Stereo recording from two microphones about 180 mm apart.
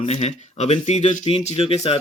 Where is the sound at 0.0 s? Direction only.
35° left (ahead or behind).